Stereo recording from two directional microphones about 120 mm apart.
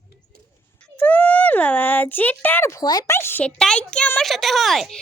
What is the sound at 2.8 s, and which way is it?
Speech, 35° left (ahead or behind).